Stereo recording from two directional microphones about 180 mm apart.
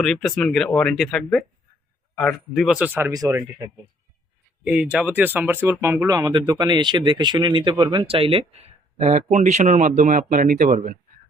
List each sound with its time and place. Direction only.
0.0 s speech: centre (ahead or behind); by 3.4 s 20° right (ahead or behind)
4.6 s speech: 5° right (ahead or behind); by 10.9 s 50° right (ahead or behind)